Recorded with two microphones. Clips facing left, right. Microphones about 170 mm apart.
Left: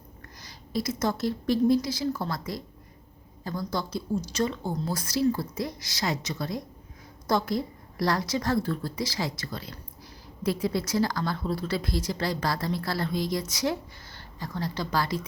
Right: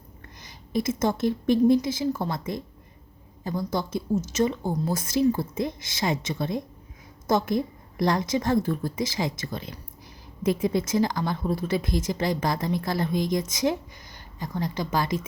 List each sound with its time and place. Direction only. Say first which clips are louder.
0.7 s a woman's voice: right 3 dB; 25° right (ahead or behind)